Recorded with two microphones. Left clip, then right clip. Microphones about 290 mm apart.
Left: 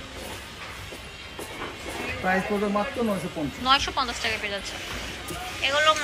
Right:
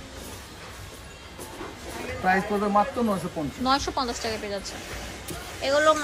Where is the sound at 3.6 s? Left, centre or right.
Centre.